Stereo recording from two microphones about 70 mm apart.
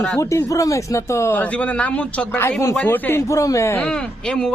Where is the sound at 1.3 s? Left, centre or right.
Left.